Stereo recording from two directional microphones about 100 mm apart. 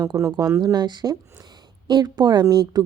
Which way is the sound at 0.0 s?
40° right (ahead or behind).